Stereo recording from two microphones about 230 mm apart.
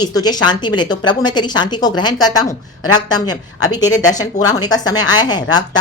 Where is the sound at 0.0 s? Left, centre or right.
Centre.